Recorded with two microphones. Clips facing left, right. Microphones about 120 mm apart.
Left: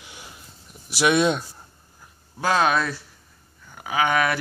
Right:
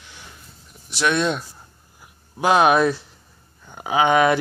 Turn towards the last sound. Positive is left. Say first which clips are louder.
# right 5 dB
turn(degrees=-20)  # may be behind; listen again after turning